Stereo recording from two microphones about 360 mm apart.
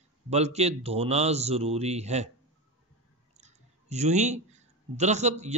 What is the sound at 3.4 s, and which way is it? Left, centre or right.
Speech, centre.